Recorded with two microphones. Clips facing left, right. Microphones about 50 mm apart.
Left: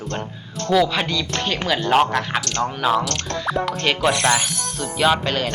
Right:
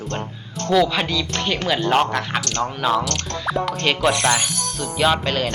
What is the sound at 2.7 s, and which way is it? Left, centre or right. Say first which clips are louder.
Speech: left 1 dB; centre.